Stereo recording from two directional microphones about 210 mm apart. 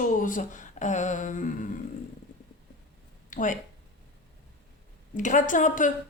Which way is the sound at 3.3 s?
35° left (ahead or behind).